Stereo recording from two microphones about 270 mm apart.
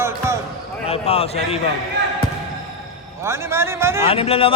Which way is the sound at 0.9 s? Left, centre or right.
Left.